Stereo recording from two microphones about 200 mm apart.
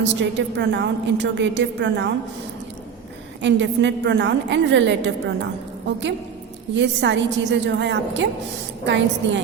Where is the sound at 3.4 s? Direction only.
65° right (ahead or behind).